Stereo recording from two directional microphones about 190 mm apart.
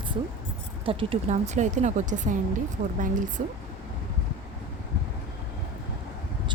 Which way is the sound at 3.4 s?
40° right (ahead or behind).